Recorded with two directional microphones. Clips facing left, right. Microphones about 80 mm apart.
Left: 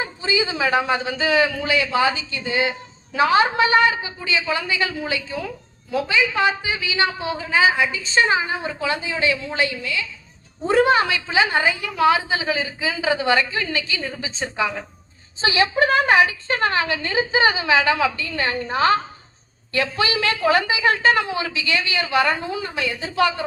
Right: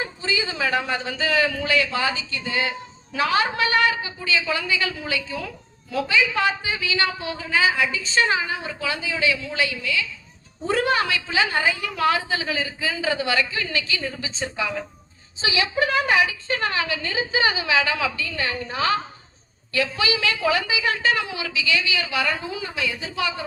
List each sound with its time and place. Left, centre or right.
0.0 s a man's voice: centre; by 23.3 s left